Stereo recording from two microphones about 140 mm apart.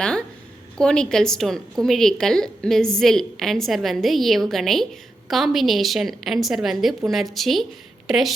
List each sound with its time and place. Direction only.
0.0 s a woman's voice: 5° left (ahead or behind)